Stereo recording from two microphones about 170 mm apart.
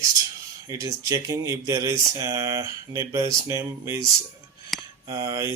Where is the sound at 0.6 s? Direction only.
20° right (ahead or behind).